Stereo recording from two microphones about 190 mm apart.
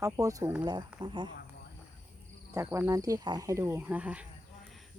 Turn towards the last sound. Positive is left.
turn(degrees=-5)  # may be behind; listen again after turning